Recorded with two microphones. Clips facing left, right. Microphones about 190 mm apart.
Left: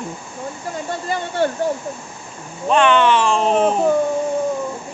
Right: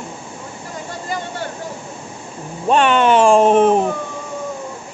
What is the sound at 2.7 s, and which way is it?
Speech, 40° right (ahead or behind).